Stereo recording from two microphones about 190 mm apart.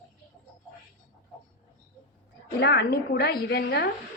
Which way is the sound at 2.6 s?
60° left (ahead or behind).